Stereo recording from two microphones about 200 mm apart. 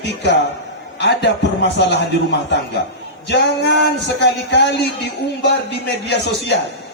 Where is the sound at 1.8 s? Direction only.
60° left (ahead or behind).